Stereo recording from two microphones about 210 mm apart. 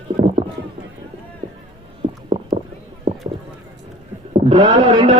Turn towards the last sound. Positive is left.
turn(degrees=-30)  # may be behind; listen again after turning